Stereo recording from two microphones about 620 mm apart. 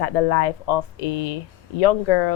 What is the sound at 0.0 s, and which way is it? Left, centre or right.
Speech, left.